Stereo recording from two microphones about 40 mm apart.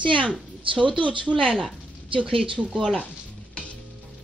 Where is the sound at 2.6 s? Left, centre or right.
Centre.